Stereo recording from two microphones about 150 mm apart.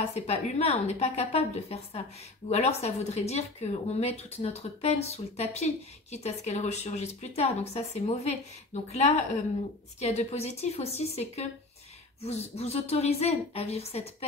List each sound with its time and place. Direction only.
0.1 s a woman's voice: 45° left (ahead or behind)